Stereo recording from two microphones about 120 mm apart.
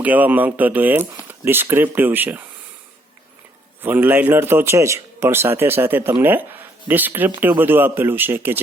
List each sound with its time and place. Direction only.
0.0 s speech: 15° right (ahead or behind)
3.8 s a man's voice: 15° right (ahead or behind)